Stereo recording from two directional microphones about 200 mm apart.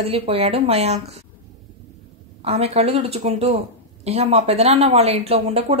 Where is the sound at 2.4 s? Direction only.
30° right (ahead or behind).